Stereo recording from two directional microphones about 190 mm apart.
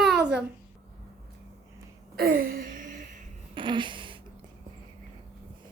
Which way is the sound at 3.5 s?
25° right (ahead or behind).